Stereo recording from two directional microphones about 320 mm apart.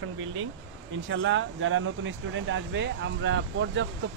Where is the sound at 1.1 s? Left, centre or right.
Right.